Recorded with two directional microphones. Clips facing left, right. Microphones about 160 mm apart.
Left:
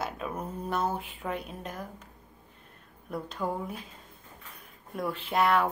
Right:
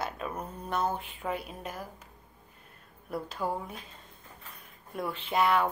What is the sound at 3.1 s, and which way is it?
Speech, 5° right (ahead or behind).